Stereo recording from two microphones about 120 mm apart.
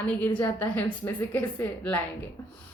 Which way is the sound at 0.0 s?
15° left (ahead or behind).